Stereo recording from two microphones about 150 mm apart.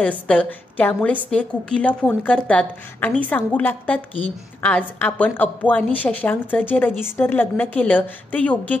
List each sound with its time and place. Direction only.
0.0 s a woman's voice: 10° left (ahead or behind)